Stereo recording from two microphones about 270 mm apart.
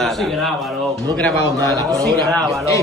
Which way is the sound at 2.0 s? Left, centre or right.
Centre.